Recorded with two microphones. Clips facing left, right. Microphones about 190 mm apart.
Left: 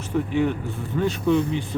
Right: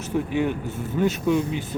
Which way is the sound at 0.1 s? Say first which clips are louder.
Left 1 dB; 15° right (ahead or behind).